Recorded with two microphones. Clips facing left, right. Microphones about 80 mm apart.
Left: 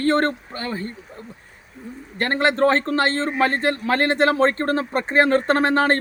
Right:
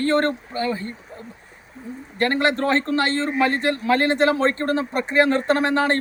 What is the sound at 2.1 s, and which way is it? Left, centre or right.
A man's voice, left.